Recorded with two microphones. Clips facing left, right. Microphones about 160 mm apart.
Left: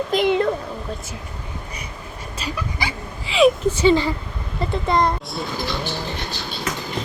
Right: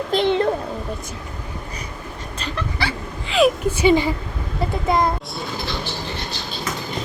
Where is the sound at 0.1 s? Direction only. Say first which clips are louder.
Right 1 dB; 30° right (ahead or behind).